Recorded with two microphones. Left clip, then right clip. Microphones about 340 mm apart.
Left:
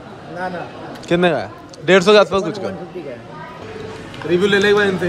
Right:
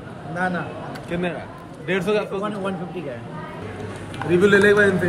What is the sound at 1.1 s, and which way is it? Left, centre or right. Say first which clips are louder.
A man's voice: left 12 dB; centre.